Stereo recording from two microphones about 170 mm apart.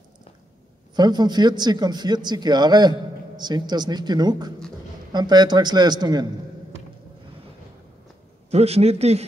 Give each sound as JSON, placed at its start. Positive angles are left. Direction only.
{"t": 0.9, "sound": "a man's voice", "side_deg": -25}
{"t": 8.5, "sound": "a man's voice", "side_deg": -40}